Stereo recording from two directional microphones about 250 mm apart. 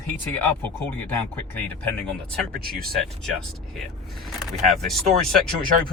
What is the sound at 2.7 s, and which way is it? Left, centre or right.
Speech, right.